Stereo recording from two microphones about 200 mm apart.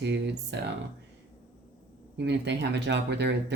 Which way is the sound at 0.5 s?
60° right (ahead or behind).